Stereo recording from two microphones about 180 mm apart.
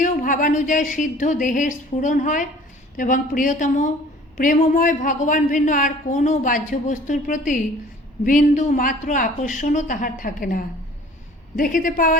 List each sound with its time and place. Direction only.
0.0 s a woman's voice: 45° left (ahead or behind)